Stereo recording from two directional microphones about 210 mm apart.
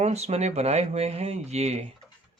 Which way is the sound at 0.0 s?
30° right (ahead or behind).